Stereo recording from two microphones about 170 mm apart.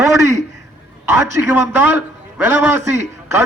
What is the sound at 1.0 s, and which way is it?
A man's voice, 15° right (ahead or behind).